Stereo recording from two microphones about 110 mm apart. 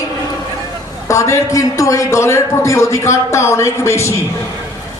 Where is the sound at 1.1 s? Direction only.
30° left (ahead or behind).